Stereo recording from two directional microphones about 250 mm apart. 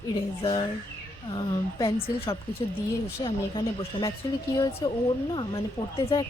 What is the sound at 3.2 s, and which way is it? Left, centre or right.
Speech, centre.